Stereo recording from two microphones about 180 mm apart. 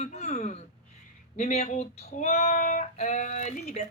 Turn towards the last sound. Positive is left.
turn(degrees=40)  # may be behind; listen again after turning